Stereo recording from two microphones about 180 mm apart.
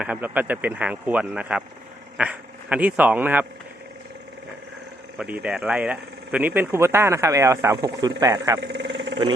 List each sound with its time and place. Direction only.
0.0 s speech: 10° right (ahead or behind)
5.1 s speech: 5° right (ahead or behind)
8.6 s vehicle: 80° right